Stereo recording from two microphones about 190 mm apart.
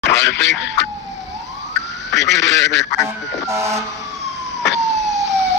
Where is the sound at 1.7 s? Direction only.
65° left (ahead or behind).